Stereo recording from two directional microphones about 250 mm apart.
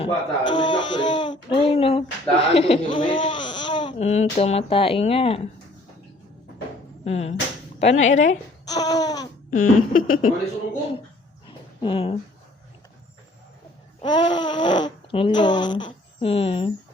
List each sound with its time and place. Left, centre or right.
0.0 s speech: centre
7.0 s speech: left
8.1 s a woman's voice: left
8.6 s speech: centre
9.5 s a sound: left
11.8 s speech: left
14.0 s speech: centre